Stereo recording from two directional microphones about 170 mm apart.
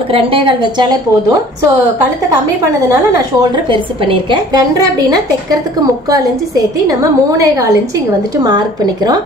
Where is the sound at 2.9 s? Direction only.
25° right (ahead or behind).